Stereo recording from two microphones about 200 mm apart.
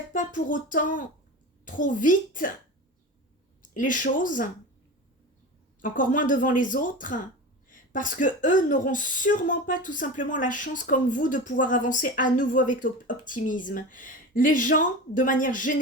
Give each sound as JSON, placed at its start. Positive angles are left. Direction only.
{"t": 0.1, "sound": "speech", "side_deg": 40}
{"t": 3.6, "sound": "speech", "side_deg": 40}
{"t": 5.8, "sound": "speech", "side_deg": 40}